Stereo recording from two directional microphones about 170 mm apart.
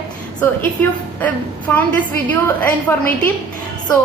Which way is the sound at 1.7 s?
10° left (ahead or behind).